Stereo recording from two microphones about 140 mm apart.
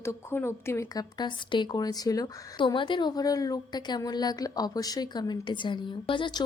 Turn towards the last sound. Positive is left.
turn(degrees=35)  # may be behind; listen again after turning